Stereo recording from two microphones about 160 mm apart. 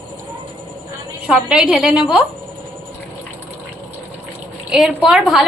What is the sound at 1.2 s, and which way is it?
Speech, 5° right (ahead or behind).